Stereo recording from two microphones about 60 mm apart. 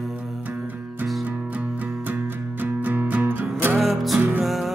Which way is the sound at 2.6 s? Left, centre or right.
Right.